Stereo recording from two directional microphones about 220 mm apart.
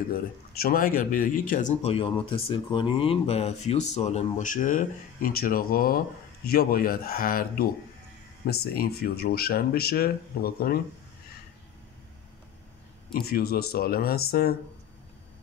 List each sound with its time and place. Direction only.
0.1 s speech: 40° left (ahead or behind)
8.7 s speech: 45° left (ahead or behind)
13.1 s speech: 45° left (ahead or behind)